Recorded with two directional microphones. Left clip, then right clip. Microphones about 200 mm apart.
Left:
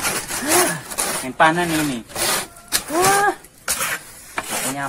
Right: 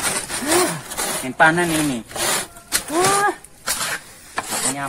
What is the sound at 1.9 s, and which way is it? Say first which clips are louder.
Rub: even; 10° right (ahead or behind).